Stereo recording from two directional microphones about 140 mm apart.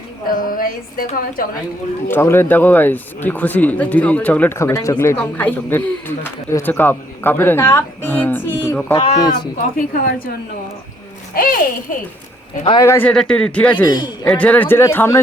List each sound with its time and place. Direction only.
0.3 s a woman's voice: 90° left
2.0 s speech: 15° left (ahead or behind)
9.0 s speech: 50° left (ahead or behind)
9.2 s speech: 30° left (ahead or behind)
9.7 s a woman's voice: 90° left
11.3 s a woman's voice: 90° left
12.8 s speech: 20° left (ahead or behind)
13.1 s speech: 5° left (ahead or behind)
13.8 s speech: 30° left (ahead or behind)
14.3 s speech: 10° left (ahead or behind)